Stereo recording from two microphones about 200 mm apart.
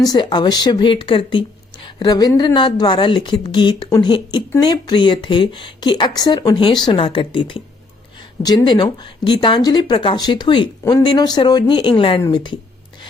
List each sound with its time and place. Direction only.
0.0 s speech: 20° left (ahead or behind)